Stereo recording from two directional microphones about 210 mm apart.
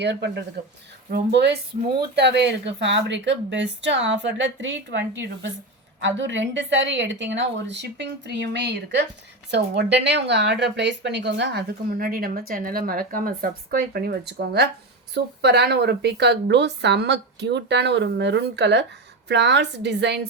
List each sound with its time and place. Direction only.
0.0 s a woman's voice: 55° right (ahead or behind)